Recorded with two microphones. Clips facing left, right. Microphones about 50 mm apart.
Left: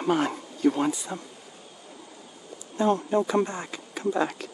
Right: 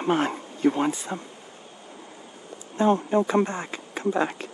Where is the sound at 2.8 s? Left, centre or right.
Right.